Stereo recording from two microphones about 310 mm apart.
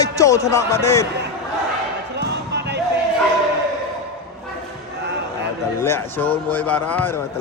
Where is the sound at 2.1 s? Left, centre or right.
Right.